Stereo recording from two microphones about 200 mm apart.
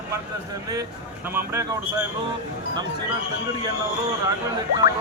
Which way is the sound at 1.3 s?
10° right (ahead or behind).